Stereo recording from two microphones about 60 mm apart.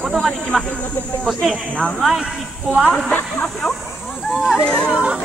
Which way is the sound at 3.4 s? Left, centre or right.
Centre.